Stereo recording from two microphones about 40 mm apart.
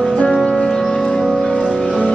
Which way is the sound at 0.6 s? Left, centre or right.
Centre.